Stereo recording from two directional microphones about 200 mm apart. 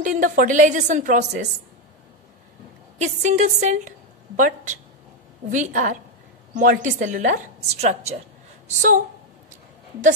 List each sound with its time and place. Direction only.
0.0 s a woman's voice: 40° right (ahead or behind)
3.0 s a woman's voice: 35° right (ahead or behind)